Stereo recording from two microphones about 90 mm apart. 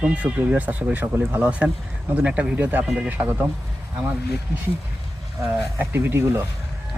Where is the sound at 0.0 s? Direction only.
15° right (ahead or behind).